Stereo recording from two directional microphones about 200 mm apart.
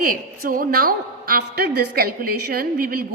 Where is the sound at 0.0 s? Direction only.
45° right (ahead or behind).